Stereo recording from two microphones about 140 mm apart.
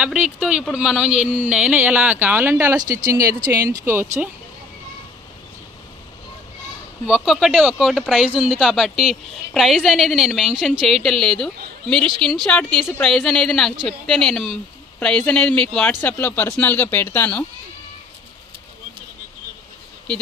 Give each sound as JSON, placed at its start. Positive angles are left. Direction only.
{"t": 0.0, "sound": "speech", "side_deg": -10}
{"t": 7.1, "sound": "a woman's voice", "side_deg": 0}